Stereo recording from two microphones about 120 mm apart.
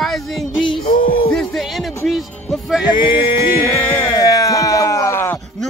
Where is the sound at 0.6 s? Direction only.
45° left (ahead or behind).